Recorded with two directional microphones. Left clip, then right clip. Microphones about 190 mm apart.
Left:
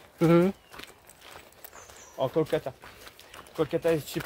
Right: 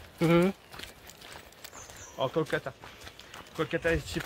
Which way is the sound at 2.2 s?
60° left (ahead or behind).